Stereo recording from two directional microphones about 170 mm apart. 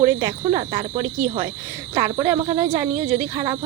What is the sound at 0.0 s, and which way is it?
Speech, 20° right (ahead or behind).